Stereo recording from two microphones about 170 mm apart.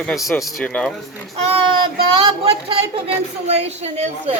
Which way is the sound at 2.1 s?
35° right (ahead or behind).